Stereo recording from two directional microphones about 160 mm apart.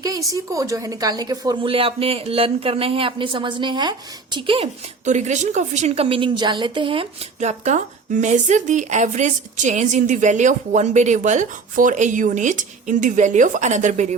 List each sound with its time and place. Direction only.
0.0 s speech: 20° right (ahead or behind)
5.0 s a woman's voice: 50° right (ahead or behind)